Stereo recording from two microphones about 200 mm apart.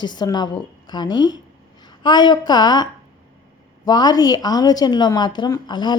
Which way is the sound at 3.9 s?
20° left (ahead or behind).